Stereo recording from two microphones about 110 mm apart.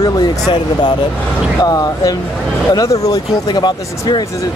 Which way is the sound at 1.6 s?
35° left (ahead or behind).